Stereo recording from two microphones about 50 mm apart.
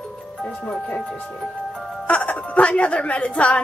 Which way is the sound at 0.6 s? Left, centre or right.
Centre.